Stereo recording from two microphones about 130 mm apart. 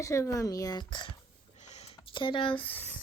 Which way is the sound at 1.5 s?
60° left (ahead or behind).